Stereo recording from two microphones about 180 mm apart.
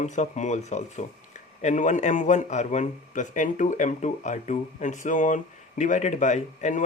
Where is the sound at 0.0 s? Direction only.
40° left (ahead or behind).